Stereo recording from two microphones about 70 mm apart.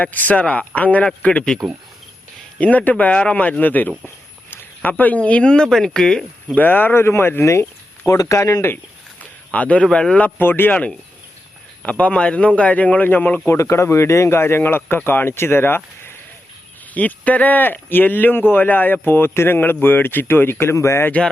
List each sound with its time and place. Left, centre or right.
0.0 s speech: left
2.6 s speech: left
6.6 s speech: left
7.6 s a sound: left
8.2 s speech: left
9.5 s speech: centre
13.5 s speech: left
16.9 s speech: left